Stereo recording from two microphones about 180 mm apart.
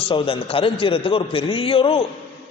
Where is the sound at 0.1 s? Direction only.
30° left (ahead or behind).